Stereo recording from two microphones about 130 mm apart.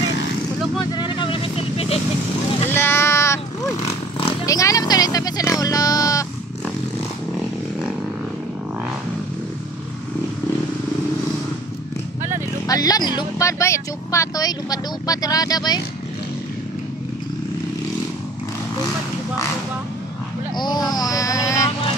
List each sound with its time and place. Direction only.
0.9 s vehicle: 35° left (ahead or behind)
2.7 s sheep: 20° left (ahead or behind)
4.5 s speech: 25° left (ahead or behind)
12.6 s speech: 30° left (ahead or behind)
20.5 s a sound: 35° left (ahead or behind)
20.9 s vehicle: 30° left (ahead or behind)